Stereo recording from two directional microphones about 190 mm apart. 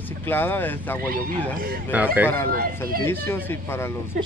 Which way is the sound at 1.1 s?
50° right (ahead or behind).